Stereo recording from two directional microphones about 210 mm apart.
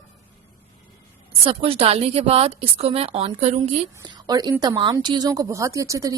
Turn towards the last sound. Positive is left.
turn(degrees=-15)  # may be behind; listen again after turning